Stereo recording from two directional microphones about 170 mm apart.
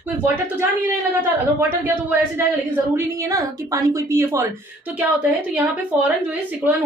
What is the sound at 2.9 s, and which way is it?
A woman's voice, 20° right (ahead or behind).